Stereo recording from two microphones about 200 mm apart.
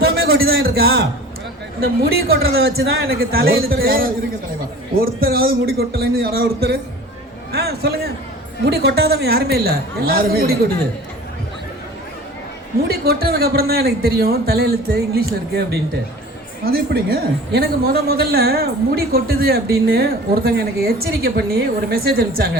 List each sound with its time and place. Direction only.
0.0 s a sound: 50° right (ahead or behind)
0.6 s a man's voice: 50° right (ahead or behind)
2.5 s a woman's voice: 50° right (ahead or behind)
12.9 s a woman's voice: 50° right (ahead or behind)